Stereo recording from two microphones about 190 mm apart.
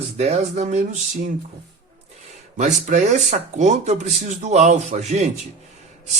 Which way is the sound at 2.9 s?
40° right (ahead or behind).